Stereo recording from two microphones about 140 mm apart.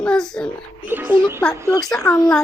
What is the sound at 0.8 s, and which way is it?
Speech, 15° right (ahead or behind).